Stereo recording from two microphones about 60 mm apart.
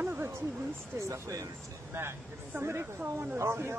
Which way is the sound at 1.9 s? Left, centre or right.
Right.